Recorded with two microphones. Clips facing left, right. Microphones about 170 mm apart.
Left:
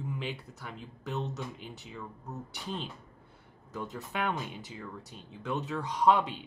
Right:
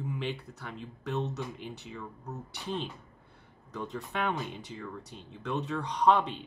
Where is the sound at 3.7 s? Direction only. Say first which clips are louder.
Right 1 dB; 5° left (ahead or behind).